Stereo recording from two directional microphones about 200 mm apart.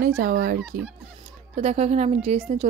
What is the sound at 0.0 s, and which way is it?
Speech, 45° right (ahead or behind).